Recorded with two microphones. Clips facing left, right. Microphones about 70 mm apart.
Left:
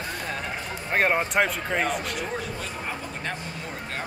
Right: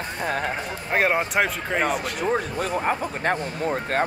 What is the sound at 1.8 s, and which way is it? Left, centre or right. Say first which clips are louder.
A man's voice: right 3 dB; right.